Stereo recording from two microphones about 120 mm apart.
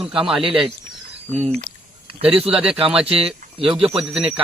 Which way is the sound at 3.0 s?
50° right (ahead or behind).